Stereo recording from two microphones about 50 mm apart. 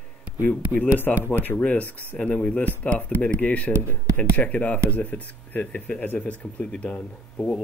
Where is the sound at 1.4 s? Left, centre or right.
Left.